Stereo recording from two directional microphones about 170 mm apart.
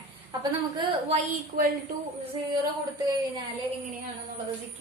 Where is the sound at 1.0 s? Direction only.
50° right (ahead or behind).